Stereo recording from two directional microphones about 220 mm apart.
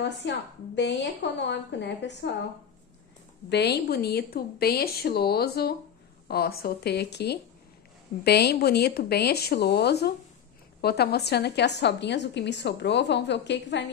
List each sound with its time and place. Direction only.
0.7 s a woman's voice: 55° left (ahead or behind)
3.4 s a woman's voice: 50° left (ahead or behind)